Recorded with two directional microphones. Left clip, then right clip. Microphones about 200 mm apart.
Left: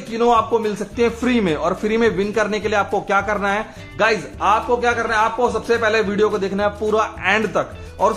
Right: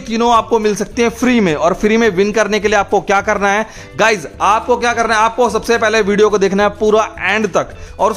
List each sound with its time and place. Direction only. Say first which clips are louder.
0.1 s a man's voice: right 4 dB; 55° right (ahead or behind); by 8.1 s 35° right (ahead or behind)